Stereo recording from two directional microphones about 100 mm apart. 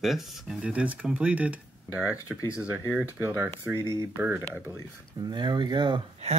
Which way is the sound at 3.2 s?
25° right (ahead or behind).